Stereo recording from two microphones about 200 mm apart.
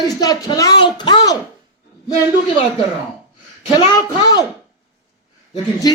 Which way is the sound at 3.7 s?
20° left (ahead or behind).